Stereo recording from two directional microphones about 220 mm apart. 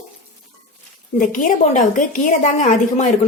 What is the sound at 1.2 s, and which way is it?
A woman's voice, 35° left (ahead or behind).